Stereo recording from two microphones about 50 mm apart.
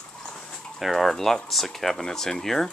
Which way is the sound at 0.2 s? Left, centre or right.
Centre.